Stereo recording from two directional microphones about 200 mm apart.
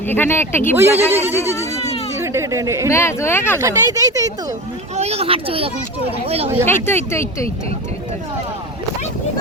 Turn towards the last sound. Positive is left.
turn(degrees=15)  # may be behind; listen again after turning